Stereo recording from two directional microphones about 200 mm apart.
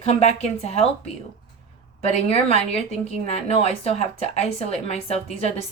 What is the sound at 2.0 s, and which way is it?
Speech, 30° left (ahead or behind).